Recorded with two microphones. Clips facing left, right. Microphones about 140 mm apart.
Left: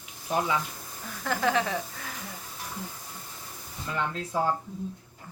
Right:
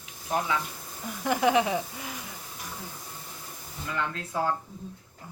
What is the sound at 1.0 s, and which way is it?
A woman's voice, 15° right (ahead or behind).